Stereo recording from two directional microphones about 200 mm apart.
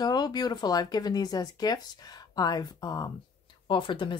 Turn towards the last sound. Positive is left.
turn(degrees=25)  # may be behind; listen again after turning